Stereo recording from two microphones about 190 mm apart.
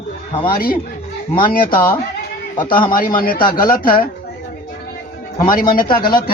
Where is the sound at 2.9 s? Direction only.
45° left (ahead or behind).